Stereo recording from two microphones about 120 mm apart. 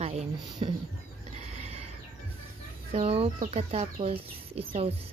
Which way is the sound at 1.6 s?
60° right (ahead or behind).